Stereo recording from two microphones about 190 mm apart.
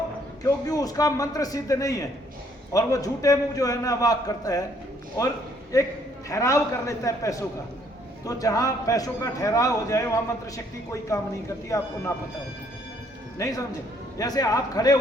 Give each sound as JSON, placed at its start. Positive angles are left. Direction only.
{"t": 0.4, "sound": "a man's voice", "side_deg": 20}
{"t": 5.7, "sound": "a man's voice", "side_deg": 20}
{"t": 13.4, "sound": "a man's voice", "side_deg": 15}